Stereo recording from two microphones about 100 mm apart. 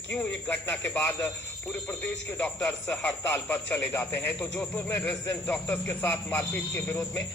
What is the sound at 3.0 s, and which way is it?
Speech, 25° left (ahead or behind).